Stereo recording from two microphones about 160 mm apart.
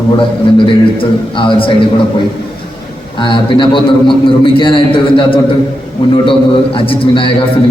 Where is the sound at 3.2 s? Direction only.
30° left (ahead or behind).